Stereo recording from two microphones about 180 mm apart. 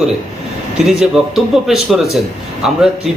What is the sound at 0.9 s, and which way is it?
A man's voice, centre (ahead or behind).